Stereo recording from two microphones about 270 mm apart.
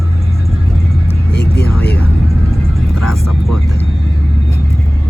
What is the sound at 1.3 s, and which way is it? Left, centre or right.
Vehicle, left.